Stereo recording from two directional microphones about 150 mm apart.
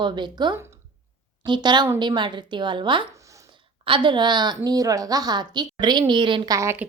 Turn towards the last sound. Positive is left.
turn(degrees=-20)  # may be behind; listen again after turning